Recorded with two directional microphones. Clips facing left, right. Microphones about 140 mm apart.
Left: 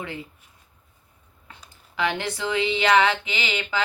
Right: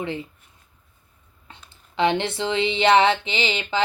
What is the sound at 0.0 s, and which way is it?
Speech, 25° right (ahead or behind).